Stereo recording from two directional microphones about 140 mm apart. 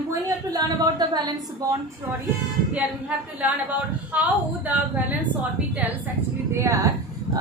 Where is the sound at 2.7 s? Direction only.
10° right (ahead or behind).